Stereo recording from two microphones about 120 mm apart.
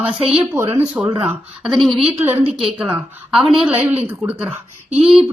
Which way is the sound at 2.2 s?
20° right (ahead or behind).